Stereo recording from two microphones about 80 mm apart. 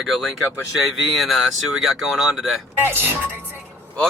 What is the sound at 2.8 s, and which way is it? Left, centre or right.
Speech, right.